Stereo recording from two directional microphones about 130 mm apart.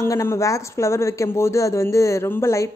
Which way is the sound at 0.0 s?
20° left (ahead or behind).